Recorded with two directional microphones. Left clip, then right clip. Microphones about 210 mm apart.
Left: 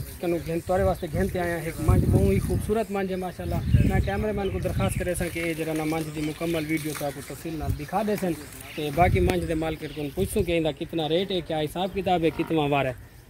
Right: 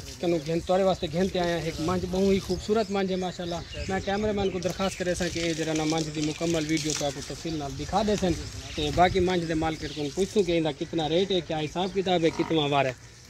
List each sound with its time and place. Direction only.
0.2 s speech: centre (ahead or behind)
7.9 s speech: 5° left (ahead or behind)
8.8 s speech: 25° left (ahead or behind)
9.5 s speech: 35° left (ahead or behind)